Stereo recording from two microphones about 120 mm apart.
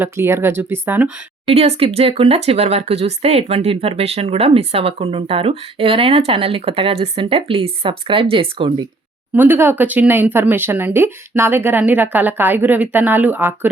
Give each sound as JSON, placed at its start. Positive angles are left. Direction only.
{"t": 0.0, "sound": "speech", "side_deg": -20}
{"t": 1.5, "sound": "speech", "side_deg": -55}
{"t": 9.3, "sound": "speech", "side_deg": -15}